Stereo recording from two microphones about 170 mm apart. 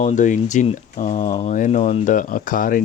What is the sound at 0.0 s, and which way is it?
Speech, 45° left (ahead or behind).